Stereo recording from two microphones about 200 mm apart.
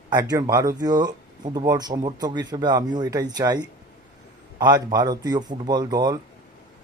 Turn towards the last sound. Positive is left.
turn(degrees=-20)  # may be behind; listen again after turning